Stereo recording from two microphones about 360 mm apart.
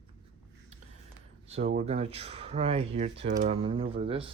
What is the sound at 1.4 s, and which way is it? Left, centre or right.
Speech, centre.